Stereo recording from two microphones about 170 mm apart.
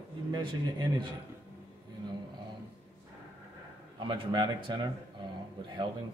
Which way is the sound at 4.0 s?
25° right (ahead or behind).